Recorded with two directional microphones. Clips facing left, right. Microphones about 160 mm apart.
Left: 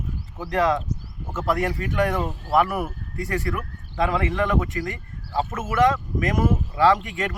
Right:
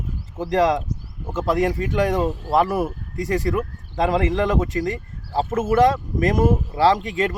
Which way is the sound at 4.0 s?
35° right (ahead or behind).